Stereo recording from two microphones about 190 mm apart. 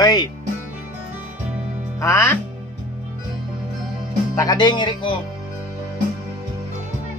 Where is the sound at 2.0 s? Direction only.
15° left (ahead or behind).